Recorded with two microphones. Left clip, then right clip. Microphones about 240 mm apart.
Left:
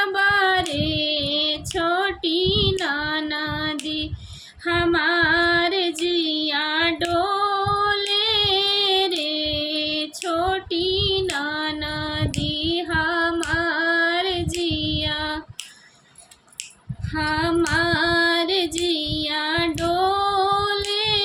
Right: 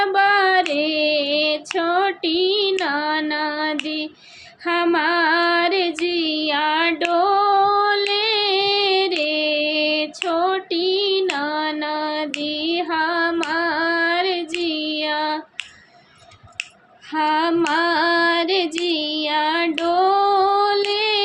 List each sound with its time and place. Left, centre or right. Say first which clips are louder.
0.0 s carnatic music: right 3 dB; centre
0.7 s child singing: right 4 dB; centre
4.6 s female singing: right 2 dB; centre
8.1 s child singing: right 1 dB; centre
10.2 s female singing: right 2 dB; centre
14.6 s child singing: right 1 dB; centre
17.1 s female singing: right 4 dB; centre
20.9 s child singing: right 2 dB; centre